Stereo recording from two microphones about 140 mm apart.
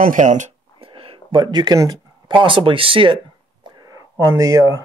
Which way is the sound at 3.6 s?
25° right (ahead or behind).